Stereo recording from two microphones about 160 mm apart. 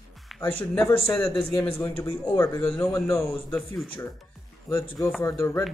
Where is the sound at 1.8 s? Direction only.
15° left (ahead or behind).